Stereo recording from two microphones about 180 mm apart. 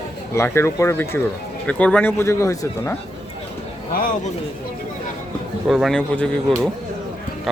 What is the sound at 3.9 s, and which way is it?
Speech, 45° left (ahead or behind).